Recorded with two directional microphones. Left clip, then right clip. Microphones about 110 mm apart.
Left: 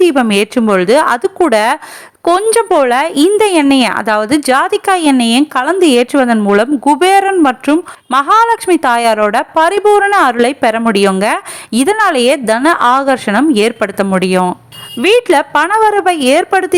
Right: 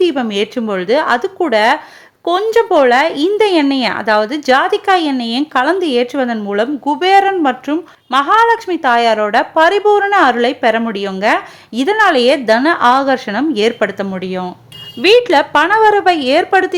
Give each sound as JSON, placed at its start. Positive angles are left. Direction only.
{"t": 0.0, "sound": "a woman's voice", "side_deg": 40}
{"t": 14.2, "sound": "speech", "side_deg": 75}
{"t": 15.0, "sound": "a woman's voice", "side_deg": 35}